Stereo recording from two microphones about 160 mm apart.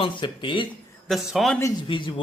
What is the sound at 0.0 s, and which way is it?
Speech, 30° left (ahead or behind).